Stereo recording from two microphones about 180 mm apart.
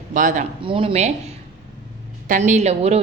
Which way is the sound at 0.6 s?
30° right (ahead or behind).